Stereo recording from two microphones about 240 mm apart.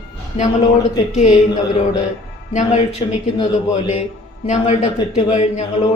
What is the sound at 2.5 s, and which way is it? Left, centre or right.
Speech, left.